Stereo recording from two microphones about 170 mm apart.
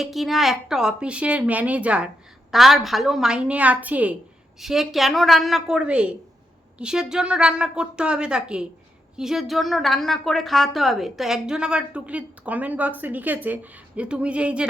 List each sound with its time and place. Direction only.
0.0 s a woman's voice: centre (ahead or behind)